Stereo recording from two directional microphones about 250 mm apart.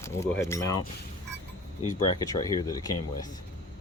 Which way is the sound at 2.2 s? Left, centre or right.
Centre.